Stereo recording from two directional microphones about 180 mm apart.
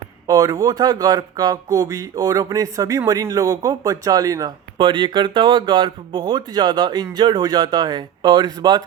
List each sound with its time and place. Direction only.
0.3 s speech: 20° right (ahead or behind)